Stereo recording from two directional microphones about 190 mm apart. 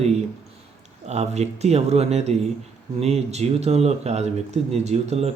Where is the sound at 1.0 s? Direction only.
35° right (ahead or behind).